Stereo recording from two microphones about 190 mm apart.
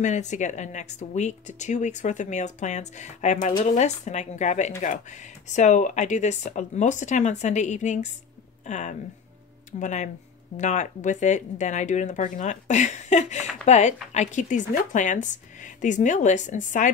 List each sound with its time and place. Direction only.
0.0 s speech: 40° left (ahead or behind)